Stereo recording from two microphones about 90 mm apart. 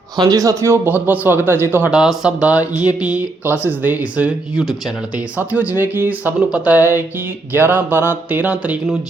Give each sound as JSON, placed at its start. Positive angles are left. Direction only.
{"t": 0.2, "sound": "a man's voice", "side_deg": -45}
{"t": 0.9, "sound": "speech", "side_deg": -20}
{"t": 1.9, "sound": "speech", "side_deg": -5}
{"t": 5.4, "sound": "speech", "side_deg": -20}